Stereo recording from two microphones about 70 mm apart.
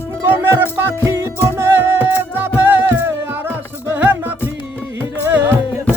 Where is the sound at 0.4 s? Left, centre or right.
Right.